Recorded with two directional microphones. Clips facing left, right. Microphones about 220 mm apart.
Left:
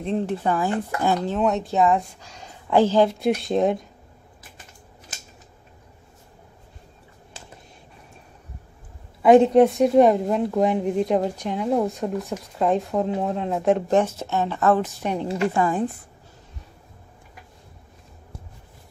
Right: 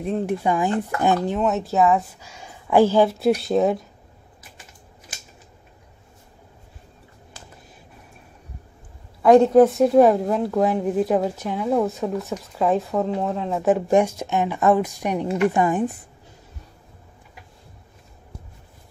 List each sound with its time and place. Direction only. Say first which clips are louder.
0.0 s speech: right 1 dB; 10° right (ahead or behind)
1.4 s speech: left 1 dB; centre (ahead or behind)
9.2 s speech: right 1 dB; centre (ahead or behind); by 15.8 s 20° right (ahead or behind)